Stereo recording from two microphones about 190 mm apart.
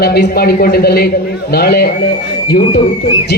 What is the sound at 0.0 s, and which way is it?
A man's voice, 55° left (ahead or behind).